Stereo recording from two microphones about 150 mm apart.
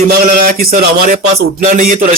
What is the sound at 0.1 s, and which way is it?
Speech, 75° right (ahead or behind).